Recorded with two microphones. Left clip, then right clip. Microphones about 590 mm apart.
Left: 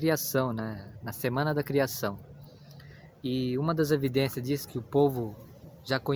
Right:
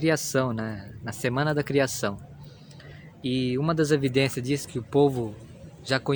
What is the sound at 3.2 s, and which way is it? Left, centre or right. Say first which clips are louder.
Speech: right 3 dB; left.